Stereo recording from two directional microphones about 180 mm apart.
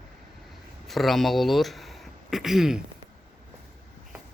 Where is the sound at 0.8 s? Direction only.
Centre (ahead or behind).